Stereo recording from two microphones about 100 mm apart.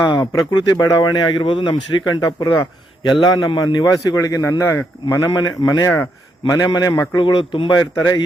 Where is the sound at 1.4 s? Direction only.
55° left (ahead or behind).